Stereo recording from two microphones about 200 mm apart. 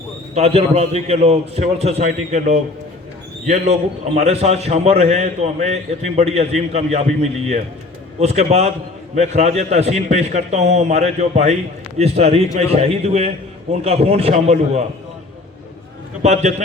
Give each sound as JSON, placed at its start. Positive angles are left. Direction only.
{"t": 0.3, "sound": "a man's voice", "side_deg": -30}
{"t": 16.2, "sound": "a man's voice", "side_deg": -35}